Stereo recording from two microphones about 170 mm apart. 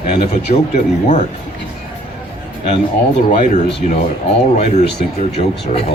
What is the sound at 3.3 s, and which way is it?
Speech, 45° left (ahead or behind).